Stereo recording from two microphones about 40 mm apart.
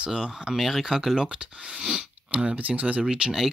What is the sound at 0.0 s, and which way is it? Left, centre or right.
Speech, centre.